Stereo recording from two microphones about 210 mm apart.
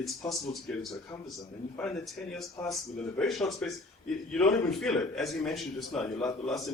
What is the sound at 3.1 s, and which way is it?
Speech, centre (ahead or behind).